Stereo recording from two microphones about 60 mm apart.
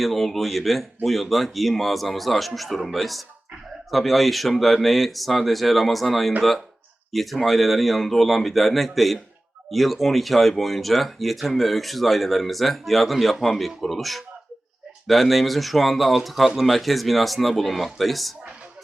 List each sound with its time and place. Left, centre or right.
0.0 s speech: centre